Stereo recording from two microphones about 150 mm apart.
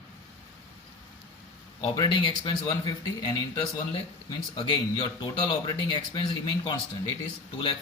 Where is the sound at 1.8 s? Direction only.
30° left (ahead or behind).